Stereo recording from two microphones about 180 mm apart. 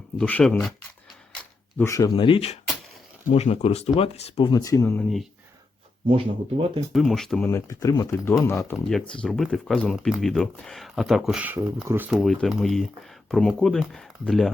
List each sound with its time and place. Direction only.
0.2 s speech: 5° left (ahead or behind)
1.8 s speech: 20° left (ahead or behind)
6.1 s speech: 30° right (ahead or behind)
6.9 s speech: centre (ahead or behind)